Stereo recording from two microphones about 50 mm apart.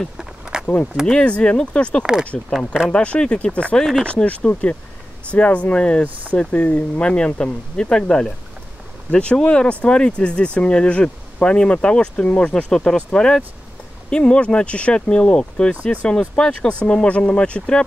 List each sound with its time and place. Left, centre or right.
0.2 s a sound: centre
1.0 s speech: centre
3.7 s speech: centre
4.0 s speech: left